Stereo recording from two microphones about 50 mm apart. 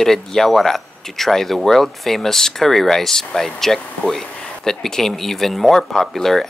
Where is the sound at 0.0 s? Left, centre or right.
Centre.